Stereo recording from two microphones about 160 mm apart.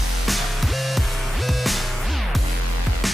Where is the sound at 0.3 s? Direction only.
Centre (ahead or behind).